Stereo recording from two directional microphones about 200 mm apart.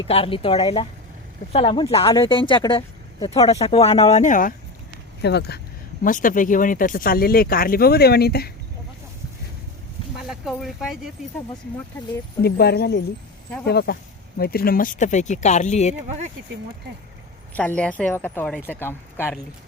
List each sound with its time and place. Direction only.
0.0 s speech: 30° left (ahead or behind)
5.2 s speech: 55° left (ahead or behind)
6.0 s speech: 40° left (ahead or behind)
10.2 s speech: centre (ahead or behind)
12.4 s speech: 50° left (ahead or behind); by 16.0 s 35° left (ahead or behind)
17.5 s speech: 5° left (ahead or behind)